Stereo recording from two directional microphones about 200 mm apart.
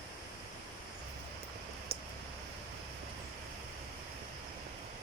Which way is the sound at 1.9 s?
55° right (ahead or behind).